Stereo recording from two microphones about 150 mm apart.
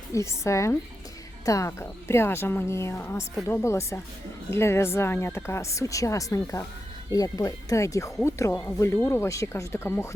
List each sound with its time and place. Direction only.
0.1 s speech: 20° left (ahead or behind)